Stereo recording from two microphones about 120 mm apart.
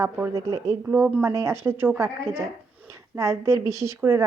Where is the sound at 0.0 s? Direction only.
25° right (ahead or behind).